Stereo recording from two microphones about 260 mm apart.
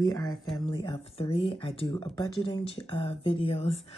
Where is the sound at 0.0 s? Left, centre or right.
Centre.